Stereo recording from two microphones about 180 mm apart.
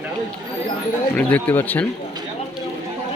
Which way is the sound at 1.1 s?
10° left (ahead or behind).